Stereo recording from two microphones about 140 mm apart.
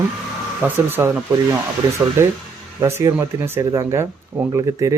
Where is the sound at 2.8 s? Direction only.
20° right (ahead or behind).